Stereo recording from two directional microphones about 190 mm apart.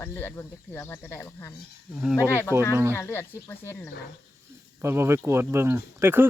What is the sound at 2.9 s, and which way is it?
Speech, 10° left (ahead or behind).